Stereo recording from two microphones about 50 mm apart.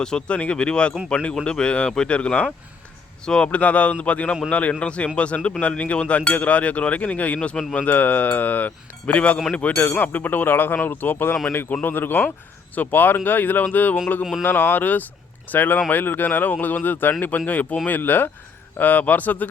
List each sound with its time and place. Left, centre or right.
0.0 s speech: centre
7.3 s speech: centre
7.7 s speech: left